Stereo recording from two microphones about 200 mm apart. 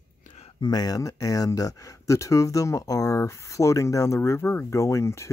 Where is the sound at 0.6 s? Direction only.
20° left (ahead or behind).